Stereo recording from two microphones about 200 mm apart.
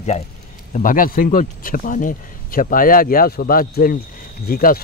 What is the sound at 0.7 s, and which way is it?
Speech, 40° left (ahead or behind).